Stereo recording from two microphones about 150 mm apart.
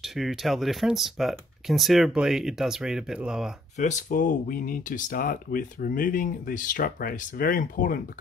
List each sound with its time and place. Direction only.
0.0 s speech: centre (ahead or behind)
3.7 s speech: 55° left (ahead or behind)